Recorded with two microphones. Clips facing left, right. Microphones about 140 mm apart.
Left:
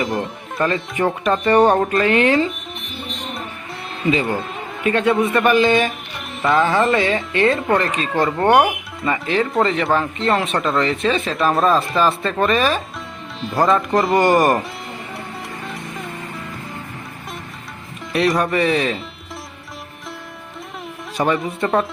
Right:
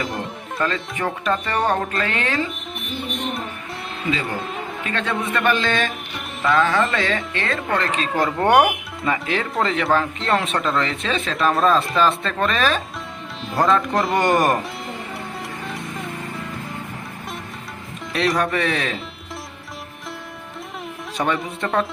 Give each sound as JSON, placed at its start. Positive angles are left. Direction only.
{"t": 0.0, "sound": "speech", "side_deg": 0}
{"t": 0.6, "sound": "music", "side_deg": 20}
{"t": 4.9, "sound": "a man's voice", "side_deg": 20}
{"t": 6.4, "sound": "music", "side_deg": 25}
{"t": 7.3, "sound": "a man's voice", "side_deg": 20}
{"t": 7.9, "sound": "speech", "side_deg": 0}
{"t": 15.6, "sound": "a sound", "side_deg": 0}
{"t": 18.1, "sound": "speech", "side_deg": 0}
{"t": 21.2, "sound": "speech", "side_deg": 0}